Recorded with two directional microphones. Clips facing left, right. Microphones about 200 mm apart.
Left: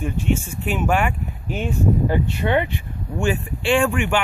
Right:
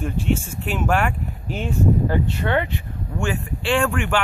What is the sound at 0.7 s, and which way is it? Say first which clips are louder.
Speech: even; 5° left (ahead or behind).